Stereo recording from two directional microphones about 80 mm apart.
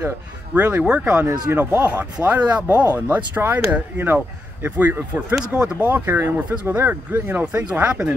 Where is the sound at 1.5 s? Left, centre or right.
Right.